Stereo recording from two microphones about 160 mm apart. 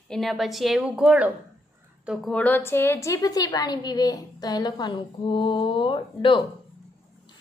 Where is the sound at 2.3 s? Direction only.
10° left (ahead or behind); by 6.5 s 30° left (ahead or behind).